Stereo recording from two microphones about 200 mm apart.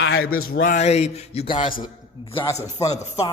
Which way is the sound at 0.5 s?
40° left (ahead or behind).